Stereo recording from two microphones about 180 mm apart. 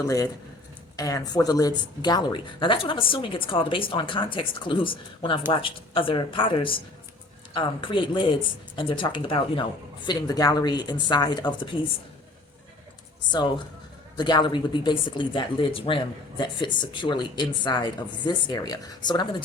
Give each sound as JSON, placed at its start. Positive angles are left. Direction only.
{"t": 0.9, "sound": "speech", "side_deg": 20}
{"t": 14.2, "sound": "speech", "side_deg": 25}